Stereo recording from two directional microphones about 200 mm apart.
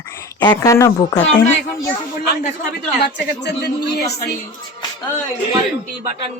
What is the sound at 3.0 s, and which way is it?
A woman's voice, 55° left (ahead or behind).